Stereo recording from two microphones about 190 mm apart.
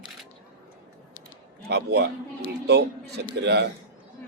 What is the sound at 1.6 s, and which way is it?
A man's voice, 60° right (ahead or behind).